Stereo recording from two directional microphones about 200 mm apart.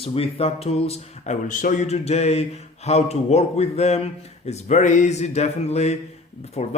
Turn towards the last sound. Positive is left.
turn(degrees=30)  # may be behind; listen again after turning